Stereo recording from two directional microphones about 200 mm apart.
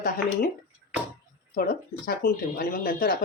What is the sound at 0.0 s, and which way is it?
Speech, 50° left (ahead or behind).